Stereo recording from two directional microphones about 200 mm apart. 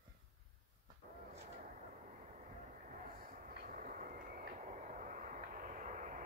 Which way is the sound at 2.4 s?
40° right (ahead or behind).